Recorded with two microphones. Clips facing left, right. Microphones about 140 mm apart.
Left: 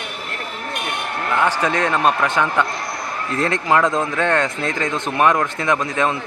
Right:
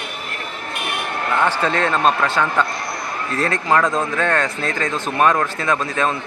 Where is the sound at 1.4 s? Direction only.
15° left (ahead or behind).